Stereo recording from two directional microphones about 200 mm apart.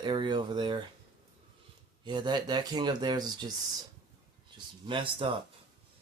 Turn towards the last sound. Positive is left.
turn(degrees=-25)  # may be behind; listen again after turning